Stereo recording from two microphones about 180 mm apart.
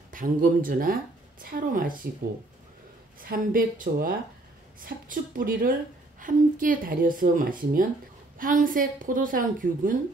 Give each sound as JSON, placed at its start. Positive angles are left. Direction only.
{"t": 0.1, "sound": "speech", "side_deg": -50}
{"t": 3.2, "sound": "speech", "side_deg": -50}